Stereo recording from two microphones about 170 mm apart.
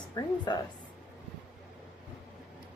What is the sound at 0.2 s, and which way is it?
Speech, 25° left (ahead or behind).